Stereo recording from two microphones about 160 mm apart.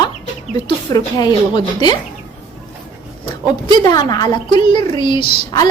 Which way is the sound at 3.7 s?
25° left (ahead or behind).